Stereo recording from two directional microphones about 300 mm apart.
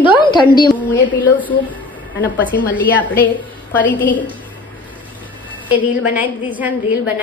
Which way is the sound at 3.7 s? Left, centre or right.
Centre.